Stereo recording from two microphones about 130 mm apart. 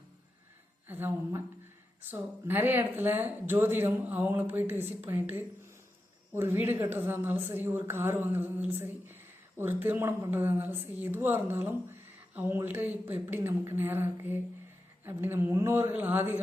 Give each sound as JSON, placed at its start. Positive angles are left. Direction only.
{"t": 0.9, "sound": "a woman's voice", "side_deg": -15}